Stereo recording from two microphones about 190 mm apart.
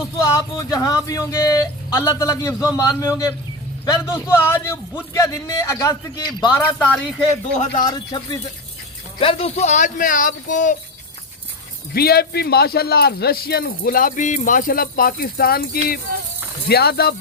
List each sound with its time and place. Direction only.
0.3 s speech: 15° left (ahead or behind)
6.5 s speech: 10° left (ahead or behind)
7.6 s speech: 35° left (ahead or behind)
7.9 s speech: 20° left (ahead or behind); by 10.8 s 45° left (ahead or behind)
11.9 s a man's voice: 55° left (ahead or behind)